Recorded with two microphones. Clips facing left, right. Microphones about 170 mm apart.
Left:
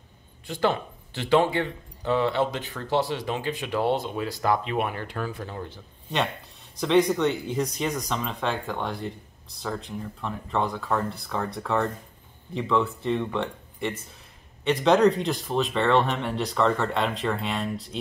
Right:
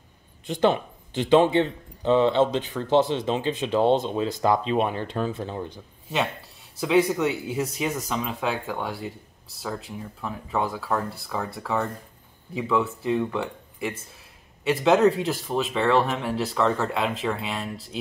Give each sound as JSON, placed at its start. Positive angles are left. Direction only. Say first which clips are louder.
{"t": 0.5, "sound": "speech", "louder": "right 3 dB", "side_deg": -20}
{"t": 6.8, "sound": "speech", "louder": "even", "side_deg": -5}